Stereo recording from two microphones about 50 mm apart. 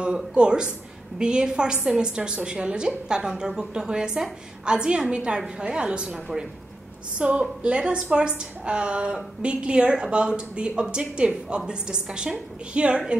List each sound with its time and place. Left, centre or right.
0.0 s a woman's voice: centre